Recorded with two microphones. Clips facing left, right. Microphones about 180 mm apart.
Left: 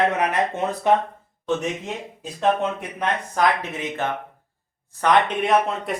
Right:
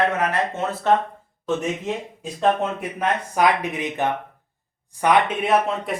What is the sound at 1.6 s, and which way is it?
Speech, centre (ahead or behind).